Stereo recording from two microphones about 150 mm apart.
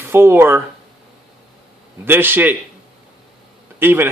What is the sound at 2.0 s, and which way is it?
Speech, 15° right (ahead or behind).